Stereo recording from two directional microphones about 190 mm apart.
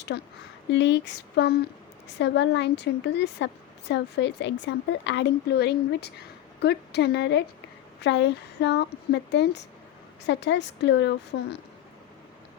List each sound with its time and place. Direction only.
0.1 s a woman's voice: 60° left (ahead or behind)